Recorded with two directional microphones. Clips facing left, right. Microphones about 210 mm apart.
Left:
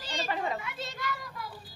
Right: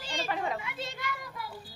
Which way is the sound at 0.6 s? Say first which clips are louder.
Right 1 dB; 25° right (ahead or behind).